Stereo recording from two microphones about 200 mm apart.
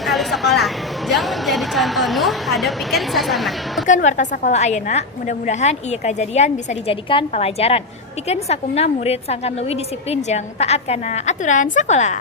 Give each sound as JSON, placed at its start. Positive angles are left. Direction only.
{"t": 0.0, "sound": "a woman's voice", "side_deg": 0}
{"t": 3.8, "sound": "a woman's voice", "side_deg": 40}